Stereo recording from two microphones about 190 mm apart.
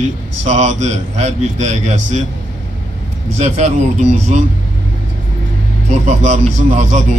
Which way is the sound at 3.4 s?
35° right (ahead or behind).